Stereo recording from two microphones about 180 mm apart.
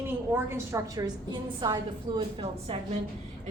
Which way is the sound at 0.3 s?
15° right (ahead or behind).